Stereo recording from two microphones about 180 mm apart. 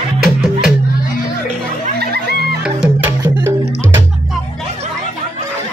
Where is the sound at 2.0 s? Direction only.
60° right (ahead or behind).